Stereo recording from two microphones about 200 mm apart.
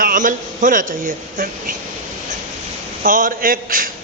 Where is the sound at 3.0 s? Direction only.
45° right (ahead or behind).